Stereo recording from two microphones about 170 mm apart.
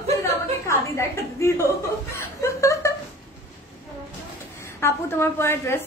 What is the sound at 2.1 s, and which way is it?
Chuckle, 15° left (ahead or behind).